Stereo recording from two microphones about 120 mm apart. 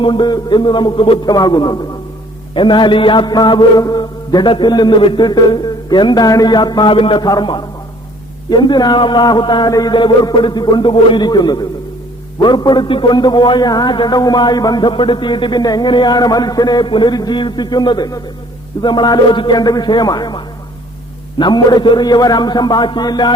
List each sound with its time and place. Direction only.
0.0 s a man's voice: 40° left (ahead or behind)